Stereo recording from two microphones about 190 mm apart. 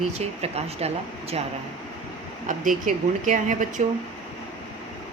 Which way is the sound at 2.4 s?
45° right (ahead or behind).